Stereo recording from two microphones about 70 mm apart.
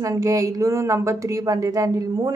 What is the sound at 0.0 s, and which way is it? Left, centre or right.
Speech, right.